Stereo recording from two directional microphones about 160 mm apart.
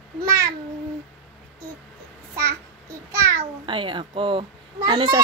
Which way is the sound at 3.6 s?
30° right (ahead or behind).